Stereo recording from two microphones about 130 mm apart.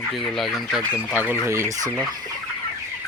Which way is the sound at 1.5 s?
25° right (ahead or behind).